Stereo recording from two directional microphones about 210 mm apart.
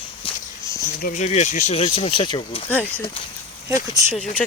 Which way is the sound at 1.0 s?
35° left (ahead or behind).